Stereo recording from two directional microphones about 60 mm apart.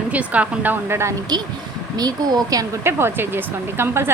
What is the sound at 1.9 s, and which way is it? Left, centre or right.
Speech, right.